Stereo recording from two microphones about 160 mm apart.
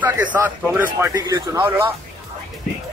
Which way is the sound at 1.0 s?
20° right (ahead or behind).